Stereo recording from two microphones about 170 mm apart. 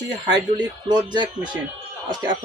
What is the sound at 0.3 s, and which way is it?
Speech, 25° right (ahead or behind).